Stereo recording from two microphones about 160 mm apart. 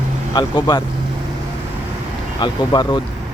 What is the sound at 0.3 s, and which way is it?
Speech, 30° left (ahead or behind).